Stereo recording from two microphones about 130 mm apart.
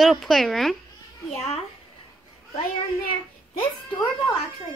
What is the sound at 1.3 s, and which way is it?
Speech, 55° left (ahead or behind).